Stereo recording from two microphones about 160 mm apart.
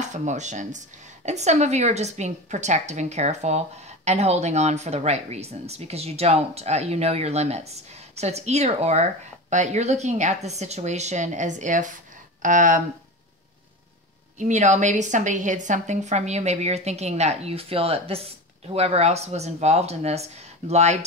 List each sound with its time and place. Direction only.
0.0 s a woman's voice: 50° right (ahead or behind)
14.4 s a woman's voice: 45° right (ahead or behind)